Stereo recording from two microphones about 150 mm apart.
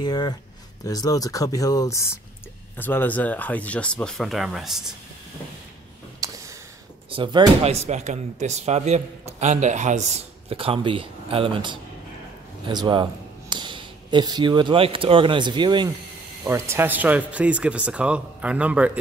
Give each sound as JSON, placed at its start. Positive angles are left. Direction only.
{"t": 0.0, "sound": "speech", "side_deg": 30}
{"t": 6.2, "sound": "a sound", "side_deg": -25}
{"t": 7.1, "sound": "speech", "side_deg": -35}
{"t": 7.7, "sound": "a man's voice", "side_deg": -50}
{"t": 16.4, "sound": "speech", "side_deg": -15}